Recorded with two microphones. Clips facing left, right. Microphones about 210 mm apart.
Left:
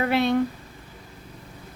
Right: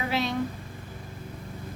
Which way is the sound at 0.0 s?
60° left (ahead or behind).